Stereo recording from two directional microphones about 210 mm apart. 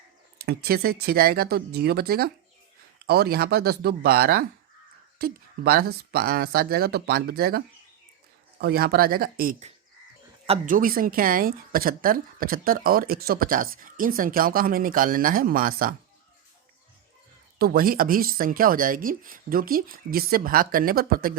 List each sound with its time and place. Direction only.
0.3 s a woman's voice: 45° right (ahead or behind)
17.6 s a woman's voice: 45° right (ahead or behind)